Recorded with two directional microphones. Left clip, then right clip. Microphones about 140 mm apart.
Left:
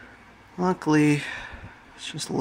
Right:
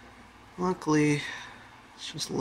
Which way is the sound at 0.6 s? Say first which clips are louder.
Left 4 dB; 35° left (ahead or behind).